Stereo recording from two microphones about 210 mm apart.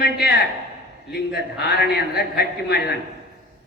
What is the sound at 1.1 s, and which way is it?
A man's voice, 50° left (ahead or behind).